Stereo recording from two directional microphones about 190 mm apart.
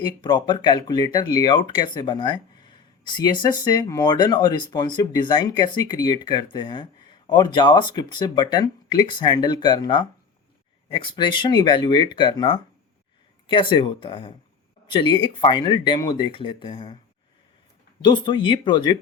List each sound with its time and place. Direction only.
0.0 s speech: 20° left (ahead or behind)
18.0 s speech: 25° left (ahead or behind)